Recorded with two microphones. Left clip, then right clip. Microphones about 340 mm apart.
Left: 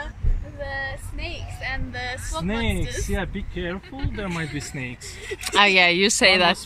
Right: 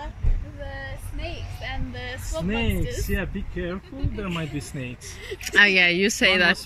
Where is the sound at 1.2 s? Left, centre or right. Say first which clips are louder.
Left 3 dB; left.